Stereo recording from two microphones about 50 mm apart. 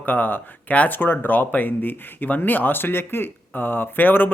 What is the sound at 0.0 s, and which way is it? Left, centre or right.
Speech, left.